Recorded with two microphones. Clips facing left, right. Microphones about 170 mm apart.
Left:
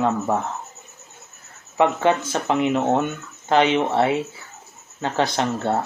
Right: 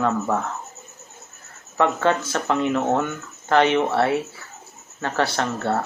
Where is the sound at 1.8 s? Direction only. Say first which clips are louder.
Left 2 dB; 15° left (ahead or behind).